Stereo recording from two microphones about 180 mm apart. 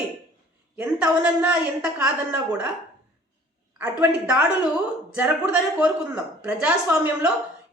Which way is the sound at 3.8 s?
5° right (ahead or behind).